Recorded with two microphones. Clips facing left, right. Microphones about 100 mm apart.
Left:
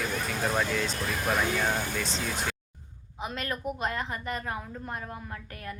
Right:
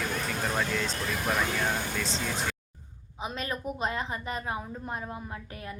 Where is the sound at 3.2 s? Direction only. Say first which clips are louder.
Even; 20° right (ahead or behind).